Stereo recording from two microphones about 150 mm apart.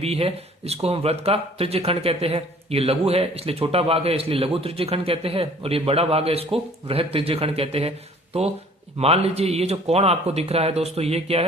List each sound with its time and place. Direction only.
0.0 s speech: 45° right (ahead or behind)